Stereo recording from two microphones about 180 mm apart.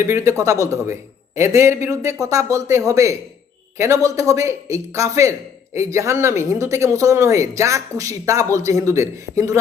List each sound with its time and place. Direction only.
0.0 s speech: 15° right (ahead or behind)